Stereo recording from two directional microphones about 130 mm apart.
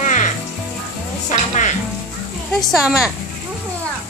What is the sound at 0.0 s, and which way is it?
Music, 70° left (ahead or behind).